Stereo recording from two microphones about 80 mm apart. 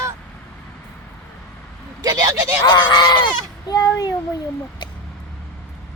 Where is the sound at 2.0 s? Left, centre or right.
Right.